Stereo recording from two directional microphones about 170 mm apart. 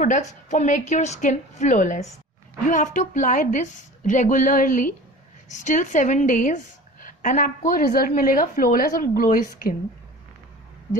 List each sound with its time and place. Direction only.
0.0 s a woman's voice: 45° left (ahead or behind)